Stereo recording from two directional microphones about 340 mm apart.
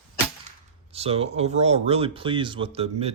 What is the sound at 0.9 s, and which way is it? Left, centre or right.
Speech, centre.